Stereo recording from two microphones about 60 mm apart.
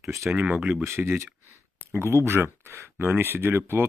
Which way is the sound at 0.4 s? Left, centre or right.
Right.